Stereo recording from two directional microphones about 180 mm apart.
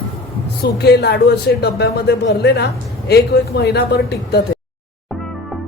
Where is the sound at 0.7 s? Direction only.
65° left (ahead or behind).